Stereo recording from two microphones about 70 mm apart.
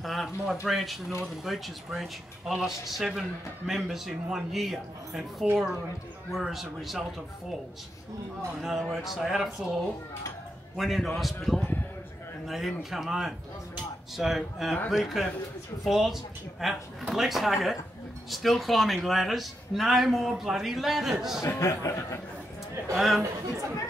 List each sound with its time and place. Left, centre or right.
0.0 s speech: centre
8.6 s a man's voice: centre
21.4 s speech: left
22.9 s speech: centre